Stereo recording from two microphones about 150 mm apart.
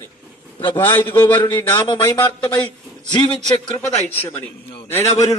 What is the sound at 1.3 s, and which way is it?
Speech, 30° left (ahead or behind).